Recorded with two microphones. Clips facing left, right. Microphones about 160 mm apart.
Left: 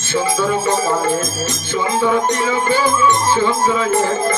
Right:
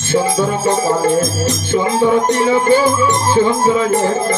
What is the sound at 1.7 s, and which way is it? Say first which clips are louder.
Music: right 3 dB; 40° right (ahead or behind).